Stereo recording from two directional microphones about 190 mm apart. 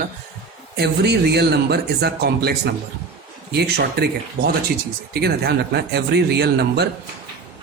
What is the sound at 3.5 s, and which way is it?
Speech, 60° right (ahead or behind).